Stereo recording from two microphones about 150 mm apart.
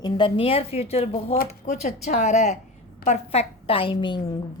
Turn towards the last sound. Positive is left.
turn(degrees=30)  # may be behind; listen again after turning